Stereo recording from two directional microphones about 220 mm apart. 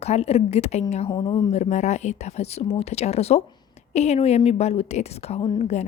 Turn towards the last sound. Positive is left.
turn(degrees=30)  # may be behind; listen again after turning